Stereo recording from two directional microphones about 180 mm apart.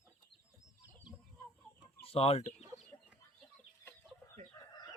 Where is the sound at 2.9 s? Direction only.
15° left (ahead or behind).